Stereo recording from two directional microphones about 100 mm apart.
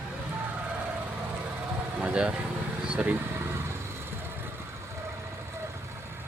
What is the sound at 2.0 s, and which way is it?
Speech, 10° right (ahead or behind).